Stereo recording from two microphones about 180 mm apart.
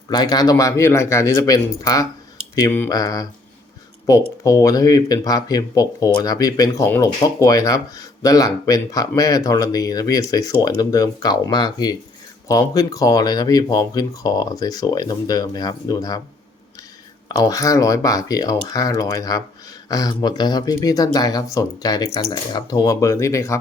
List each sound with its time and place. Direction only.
0.1 s speech: 20° left (ahead or behind)
4.4 s speech: 20° left (ahead or behind)
17.2 s speech: 20° left (ahead or behind)